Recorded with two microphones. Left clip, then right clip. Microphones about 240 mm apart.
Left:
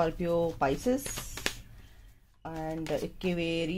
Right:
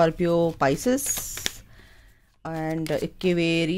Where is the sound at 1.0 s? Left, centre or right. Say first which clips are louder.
Right 6 dB; centre.